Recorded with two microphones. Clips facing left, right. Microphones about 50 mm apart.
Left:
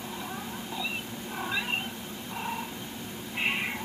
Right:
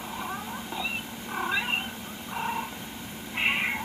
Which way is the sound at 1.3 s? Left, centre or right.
Right.